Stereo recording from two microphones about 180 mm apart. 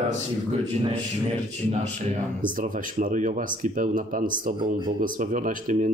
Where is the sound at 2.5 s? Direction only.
45° right (ahead or behind).